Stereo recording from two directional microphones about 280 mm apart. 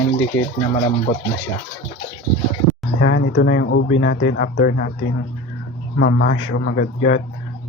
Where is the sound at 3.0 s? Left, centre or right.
Left.